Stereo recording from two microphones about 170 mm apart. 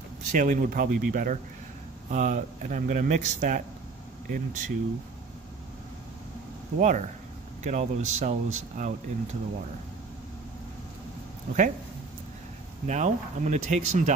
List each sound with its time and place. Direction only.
0.3 s speech: 50° right (ahead or behind)
6.8 s speech: 45° right (ahead or behind)
11.5 s speech: 60° right (ahead or behind)
12.8 s speech: 45° right (ahead or behind)